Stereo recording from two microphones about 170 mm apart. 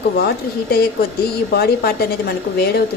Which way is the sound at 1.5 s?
65° left (ahead or behind).